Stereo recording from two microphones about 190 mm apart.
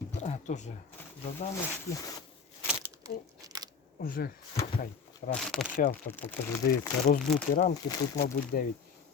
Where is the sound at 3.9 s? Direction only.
50° left (ahead or behind).